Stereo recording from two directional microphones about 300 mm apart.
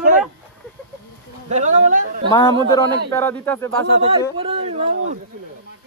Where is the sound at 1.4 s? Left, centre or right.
Right.